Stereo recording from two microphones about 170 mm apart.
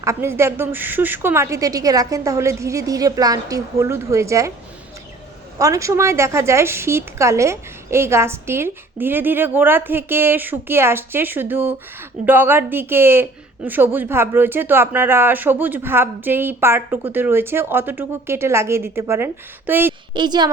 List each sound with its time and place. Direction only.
0.0 s a woman's voice: 15° right (ahead or behind)
5.5 s a woman's voice: 20° right (ahead or behind)
20.1 s a woman's voice: 25° right (ahead or behind)